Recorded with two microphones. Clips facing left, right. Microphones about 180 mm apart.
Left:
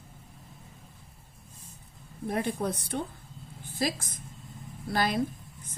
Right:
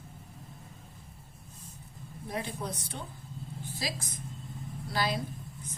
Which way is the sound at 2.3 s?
55° left (ahead or behind).